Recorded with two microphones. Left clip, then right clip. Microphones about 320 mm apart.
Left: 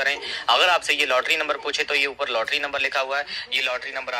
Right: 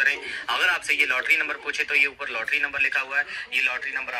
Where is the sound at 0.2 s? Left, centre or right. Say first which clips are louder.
Left 5 dB; left.